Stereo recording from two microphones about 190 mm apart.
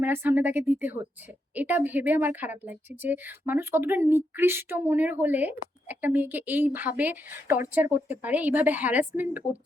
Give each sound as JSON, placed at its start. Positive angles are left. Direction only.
{"t": 0.0, "sound": "a woman's voice", "side_deg": -10}